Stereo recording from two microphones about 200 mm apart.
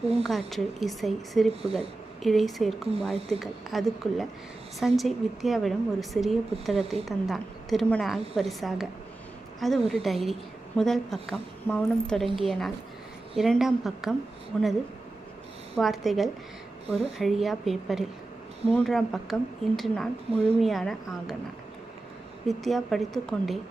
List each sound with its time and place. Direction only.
0.2 s a woman's voice: centre (ahead or behind)
1.6 s speech: 30° right (ahead or behind)
2.2 s a woman's voice: centre (ahead or behind)
15.7 s a woman's voice: centre (ahead or behind)
20.3 s speech: 30° right (ahead or behind)
20.6 s a woman's voice: centre (ahead or behind)
22.4 s a woman's voice: centre (ahead or behind)